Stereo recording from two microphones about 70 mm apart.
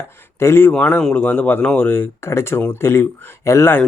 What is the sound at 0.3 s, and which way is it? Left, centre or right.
Speech, left.